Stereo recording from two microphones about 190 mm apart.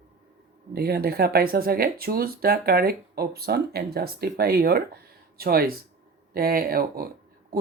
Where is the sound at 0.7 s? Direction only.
55° right (ahead or behind).